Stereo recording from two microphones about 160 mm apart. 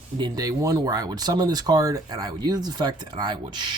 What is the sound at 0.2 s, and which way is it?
Speech, 20° right (ahead or behind).